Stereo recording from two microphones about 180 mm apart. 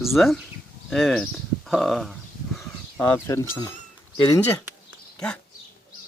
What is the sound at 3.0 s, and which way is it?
Speech, 20° left (ahead or behind).